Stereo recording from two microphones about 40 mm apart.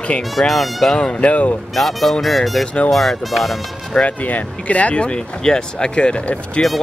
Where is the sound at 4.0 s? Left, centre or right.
Left.